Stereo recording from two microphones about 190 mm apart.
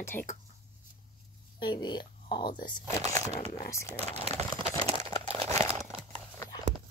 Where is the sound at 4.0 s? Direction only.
35° right (ahead or behind).